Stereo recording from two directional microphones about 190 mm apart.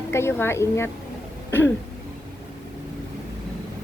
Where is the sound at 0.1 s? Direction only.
15° left (ahead or behind).